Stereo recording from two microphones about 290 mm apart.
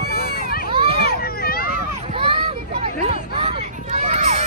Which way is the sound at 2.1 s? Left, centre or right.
Centre.